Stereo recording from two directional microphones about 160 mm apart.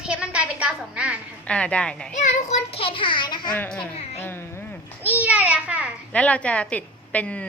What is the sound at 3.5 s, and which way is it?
Speech, 5° left (ahead or behind).